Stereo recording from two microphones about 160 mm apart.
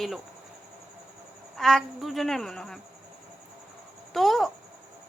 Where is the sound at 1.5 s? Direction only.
Centre (ahead or behind).